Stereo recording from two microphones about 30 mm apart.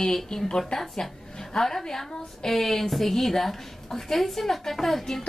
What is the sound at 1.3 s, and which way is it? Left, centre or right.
A woman's voice, centre.